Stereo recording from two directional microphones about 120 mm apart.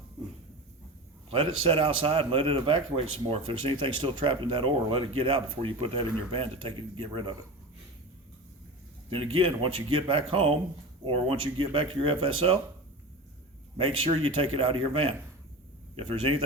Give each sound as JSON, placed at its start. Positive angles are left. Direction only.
{"t": 1.3, "sound": "a man's voice", "side_deg": -50}
{"t": 9.0, "sound": "a man's voice", "side_deg": -50}
{"t": 13.7, "sound": "a man's voice", "side_deg": -50}